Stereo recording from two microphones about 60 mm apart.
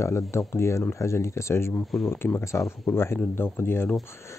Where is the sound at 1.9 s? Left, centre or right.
Centre.